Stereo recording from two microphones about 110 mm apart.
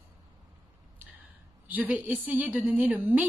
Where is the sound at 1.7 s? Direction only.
15° right (ahead or behind).